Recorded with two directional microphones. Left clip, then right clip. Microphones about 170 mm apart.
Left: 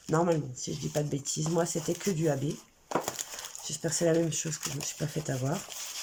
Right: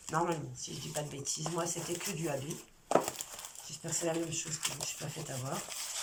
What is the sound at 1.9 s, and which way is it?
Speech, 45° left (ahead or behind).